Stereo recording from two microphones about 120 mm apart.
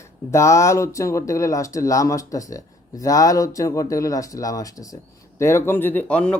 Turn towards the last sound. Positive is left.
turn(degrees=10)  # may be behind; listen again after turning